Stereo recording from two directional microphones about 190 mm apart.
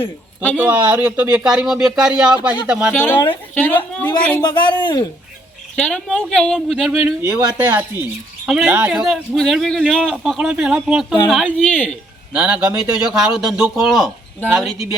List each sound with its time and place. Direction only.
0.5 s a man's voice: 10° right (ahead or behind)
2.9 s a woman's voice: 10° left (ahead or behind)
4.4 s speech: 25° left (ahead or behind)
5.7 s a man's voice: 5° left (ahead or behind)
7.2 s a man's voice: 15° right (ahead or behind); by 11.9 s 5° left (ahead or behind)
12.3 s a man's voice: 5° right (ahead or behind)